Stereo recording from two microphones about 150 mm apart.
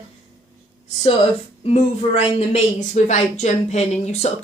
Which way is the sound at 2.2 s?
45° left (ahead or behind).